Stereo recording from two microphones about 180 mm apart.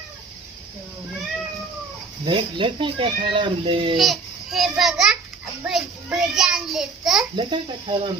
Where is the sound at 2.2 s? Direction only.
25° right (ahead or behind).